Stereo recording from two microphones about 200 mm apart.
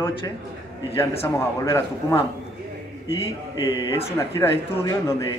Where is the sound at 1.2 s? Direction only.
15° left (ahead or behind).